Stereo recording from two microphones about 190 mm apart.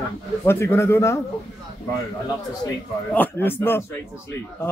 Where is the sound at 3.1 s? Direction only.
10° left (ahead or behind).